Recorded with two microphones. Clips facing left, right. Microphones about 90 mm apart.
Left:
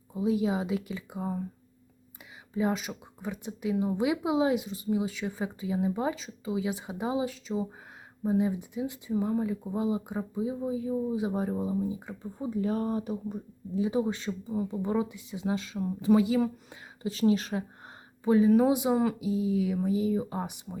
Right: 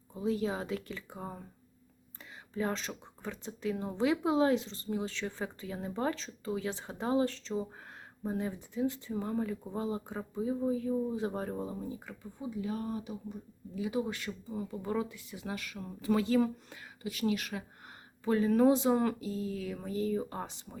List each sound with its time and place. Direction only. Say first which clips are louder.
0.1 s speech: left 5 dB; 15° left (ahead or behind)
2.5 s speech: left 5 dB; 10° left (ahead or behind)
12.2 s speech: left 7 dB; 45° left (ahead or behind)
13.7 s speech: left 6 dB; 25° left (ahead or behind)
17.0 s speech: left 7 dB; 30° left (ahead or behind)
18.3 s speech: left 4 dB; 15° left (ahead or behind)